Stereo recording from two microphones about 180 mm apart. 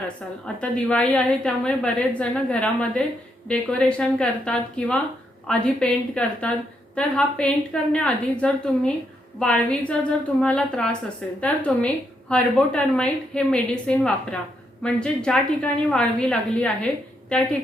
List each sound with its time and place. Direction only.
0.4 s a woman's voice: 5° left (ahead or behind)